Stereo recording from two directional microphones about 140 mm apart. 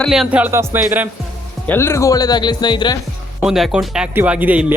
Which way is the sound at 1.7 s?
20° left (ahead or behind).